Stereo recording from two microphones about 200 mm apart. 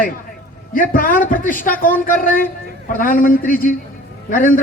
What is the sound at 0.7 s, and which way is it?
A man's voice, 45° left (ahead or behind).